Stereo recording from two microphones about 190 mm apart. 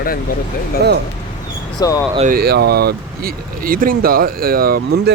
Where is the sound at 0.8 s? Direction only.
60° right (ahead or behind).